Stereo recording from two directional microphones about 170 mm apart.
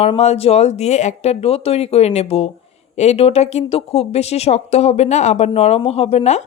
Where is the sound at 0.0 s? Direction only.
40° left (ahead or behind).